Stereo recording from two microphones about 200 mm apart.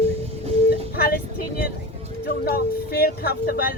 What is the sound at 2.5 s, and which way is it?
Speech, 50° left (ahead or behind).